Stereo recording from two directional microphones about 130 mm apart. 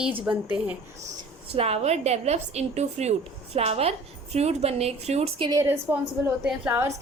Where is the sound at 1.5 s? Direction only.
55° right (ahead or behind).